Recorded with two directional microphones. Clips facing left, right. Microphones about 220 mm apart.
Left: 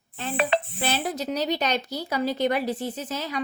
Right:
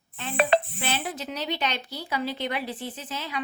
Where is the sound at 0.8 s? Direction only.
40° left (ahead or behind).